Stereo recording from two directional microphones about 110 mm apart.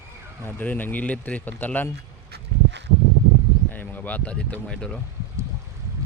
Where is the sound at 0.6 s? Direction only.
15° left (ahead or behind).